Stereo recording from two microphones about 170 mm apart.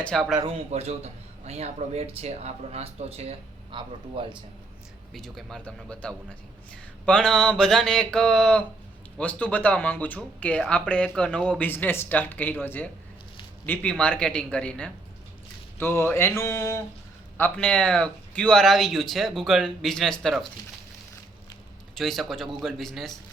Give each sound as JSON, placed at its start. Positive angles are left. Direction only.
{"t": 0.0, "sound": "speech", "side_deg": 5}
{"t": 0.4, "sound": "speech", "side_deg": -40}
{"t": 5.1, "sound": "speech", "side_deg": 0}
{"t": 21.9, "sound": "speech", "side_deg": 0}